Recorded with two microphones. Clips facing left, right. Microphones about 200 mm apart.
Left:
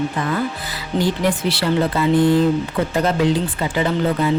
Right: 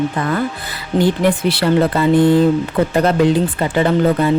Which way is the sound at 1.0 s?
55° right (ahead or behind).